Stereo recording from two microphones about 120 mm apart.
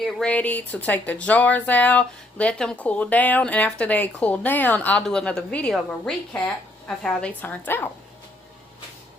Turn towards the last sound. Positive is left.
turn(degrees=15)  # may be behind; listen again after turning